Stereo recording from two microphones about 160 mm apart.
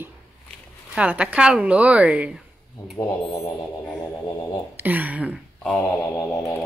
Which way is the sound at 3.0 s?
20° left (ahead or behind).